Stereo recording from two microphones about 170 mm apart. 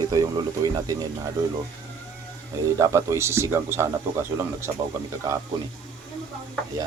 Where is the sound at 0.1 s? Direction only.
20° right (ahead or behind).